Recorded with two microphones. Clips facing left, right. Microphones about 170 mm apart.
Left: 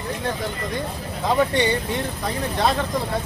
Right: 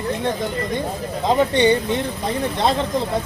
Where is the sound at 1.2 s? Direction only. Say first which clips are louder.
Right 4 dB; 20° right (ahead or behind).